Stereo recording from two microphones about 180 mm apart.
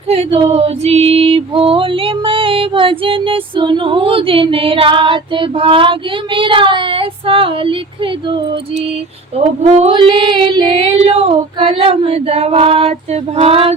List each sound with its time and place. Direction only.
0.1 s female singing: 35° right (ahead or behind)
9.6 s female singing: 30° right (ahead or behind)